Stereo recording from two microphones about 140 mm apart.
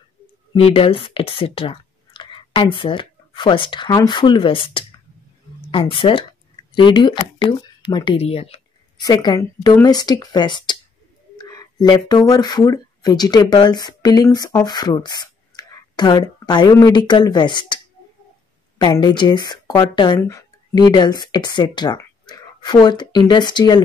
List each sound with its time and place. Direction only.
0.6 s speech: 45° left (ahead or behind)
8.2 s speech: 45° left (ahead or behind)
9.0 s speech: 30° left (ahead or behind)
11.3 s a sound: 25° left (ahead or behind)
11.9 s speech: 30° left (ahead or behind)
18.8 s speech: 30° left (ahead or behind)